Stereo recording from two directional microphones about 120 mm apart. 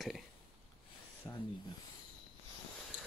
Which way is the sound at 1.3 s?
35° left (ahead or behind).